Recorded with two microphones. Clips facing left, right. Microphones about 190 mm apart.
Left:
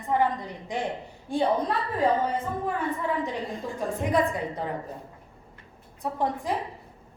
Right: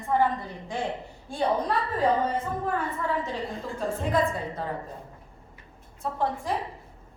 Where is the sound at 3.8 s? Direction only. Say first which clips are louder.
Left 1 dB; 15° left (ahead or behind).